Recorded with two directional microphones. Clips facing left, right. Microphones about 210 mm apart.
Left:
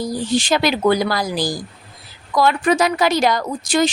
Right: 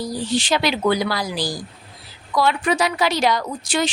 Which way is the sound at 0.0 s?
45° left (ahead or behind).